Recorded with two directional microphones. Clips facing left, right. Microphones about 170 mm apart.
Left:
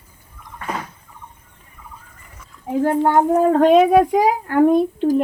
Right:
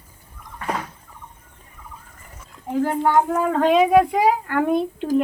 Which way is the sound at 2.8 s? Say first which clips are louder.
Left 3 dB; 50° left (ahead or behind).